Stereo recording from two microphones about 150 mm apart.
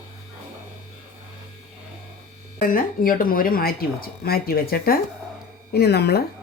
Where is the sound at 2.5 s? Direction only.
70° left (ahead or behind); by 6.2 s 90° left.